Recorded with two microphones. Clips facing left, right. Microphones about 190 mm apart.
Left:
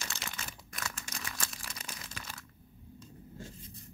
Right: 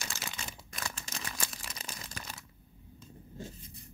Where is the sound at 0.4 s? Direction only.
25° right (ahead or behind).